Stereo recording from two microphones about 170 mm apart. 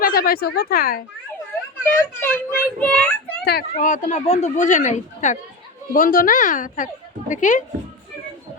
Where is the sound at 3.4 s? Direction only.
70° left (ahead or behind).